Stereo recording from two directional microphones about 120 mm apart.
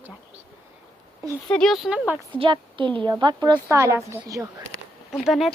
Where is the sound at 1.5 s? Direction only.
Centre (ahead or behind).